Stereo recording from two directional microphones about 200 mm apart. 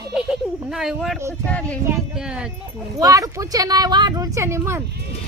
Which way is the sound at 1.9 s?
5° right (ahead or behind).